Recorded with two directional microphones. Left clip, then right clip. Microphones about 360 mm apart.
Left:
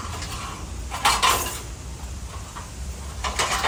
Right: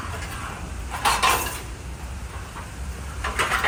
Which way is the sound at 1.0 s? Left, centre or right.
Centre.